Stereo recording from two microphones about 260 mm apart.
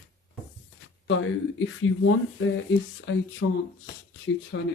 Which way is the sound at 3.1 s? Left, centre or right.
Left.